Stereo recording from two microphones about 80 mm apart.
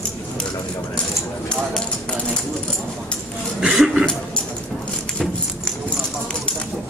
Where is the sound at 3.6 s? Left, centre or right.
Centre.